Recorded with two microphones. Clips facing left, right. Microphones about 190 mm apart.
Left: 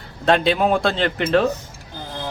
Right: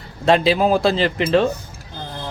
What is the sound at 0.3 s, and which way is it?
Speech, centre (ahead or behind).